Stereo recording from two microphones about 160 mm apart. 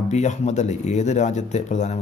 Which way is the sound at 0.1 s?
45° left (ahead or behind).